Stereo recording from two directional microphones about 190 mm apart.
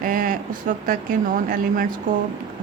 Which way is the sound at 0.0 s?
45° right (ahead or behind).